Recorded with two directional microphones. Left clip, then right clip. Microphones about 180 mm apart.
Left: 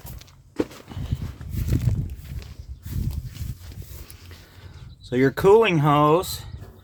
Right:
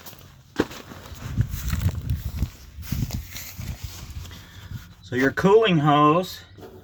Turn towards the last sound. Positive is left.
turn(degrees=35)  # may be behind; listen again after turning